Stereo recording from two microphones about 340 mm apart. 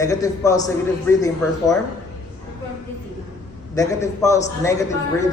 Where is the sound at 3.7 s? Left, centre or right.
Centre.